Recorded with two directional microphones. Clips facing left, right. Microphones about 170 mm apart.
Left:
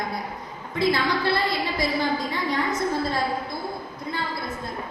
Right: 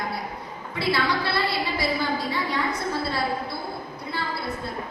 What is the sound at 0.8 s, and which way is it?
A woman's voice, 45° left (ahead or behind).